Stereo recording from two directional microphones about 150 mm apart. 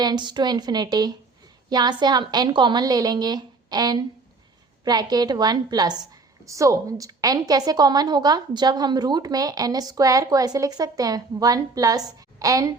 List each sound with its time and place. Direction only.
0.0 s a woman's voice: 30° right (ahead or behind)